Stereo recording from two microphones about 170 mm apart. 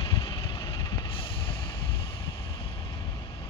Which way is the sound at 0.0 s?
30° left (ahead or behind).